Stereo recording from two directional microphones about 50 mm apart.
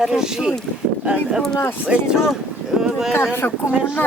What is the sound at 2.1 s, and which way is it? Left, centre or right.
Speech, centre.